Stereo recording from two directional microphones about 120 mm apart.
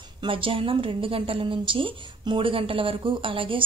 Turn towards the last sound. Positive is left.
turn(degrees=-45)  # may be behind; listen again after turning